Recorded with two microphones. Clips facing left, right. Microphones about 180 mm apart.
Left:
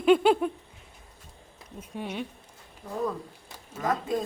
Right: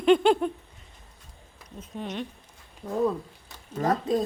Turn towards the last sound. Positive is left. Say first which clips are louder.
# right 4 dB
turn(degrees=-35)  # may be behind; listen again after turning